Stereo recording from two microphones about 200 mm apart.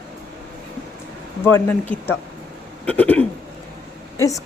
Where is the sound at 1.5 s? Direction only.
10° left (ahead or behind).